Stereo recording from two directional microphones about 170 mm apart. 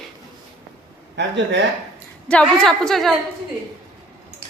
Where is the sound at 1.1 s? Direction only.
90° right.